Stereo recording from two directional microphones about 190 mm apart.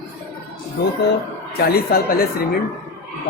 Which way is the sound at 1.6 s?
55° left (ahead or behind).